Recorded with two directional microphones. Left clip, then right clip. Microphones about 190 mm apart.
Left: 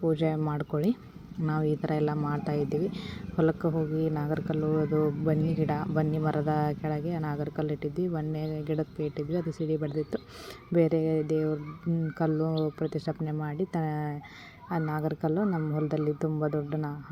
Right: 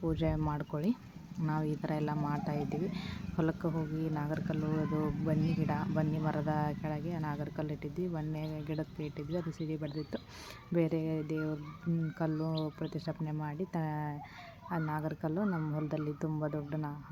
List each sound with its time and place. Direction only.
0.0 s speech: 15° left (ahead or behind)